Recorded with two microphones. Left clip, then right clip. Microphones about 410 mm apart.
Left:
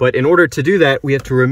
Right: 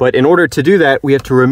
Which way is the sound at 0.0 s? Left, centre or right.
Centre.